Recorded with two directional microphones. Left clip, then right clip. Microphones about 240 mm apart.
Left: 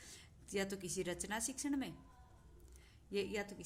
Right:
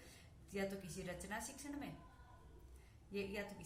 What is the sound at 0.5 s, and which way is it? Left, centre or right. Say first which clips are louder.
A woman's voice: left 4 dB; left.